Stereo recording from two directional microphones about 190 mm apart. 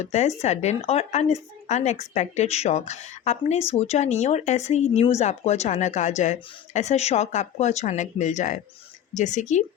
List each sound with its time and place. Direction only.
0.0 s speech: 35° left (ahead or behind)